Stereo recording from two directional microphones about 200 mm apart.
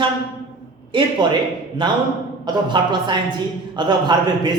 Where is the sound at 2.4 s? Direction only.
20° right (ahead or behind).